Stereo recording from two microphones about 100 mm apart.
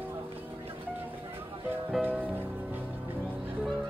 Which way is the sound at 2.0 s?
15° right (ahead or behind).